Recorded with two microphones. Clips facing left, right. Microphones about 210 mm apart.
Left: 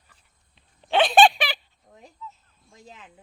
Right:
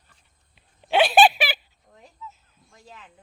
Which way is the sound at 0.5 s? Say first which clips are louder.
Right 1 dB; 10° right (ahead or behind).